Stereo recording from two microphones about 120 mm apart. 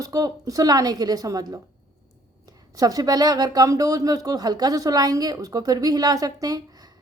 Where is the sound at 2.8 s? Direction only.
30° right (ahead or behind).